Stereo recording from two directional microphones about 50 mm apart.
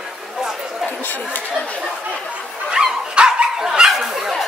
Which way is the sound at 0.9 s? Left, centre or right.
Left.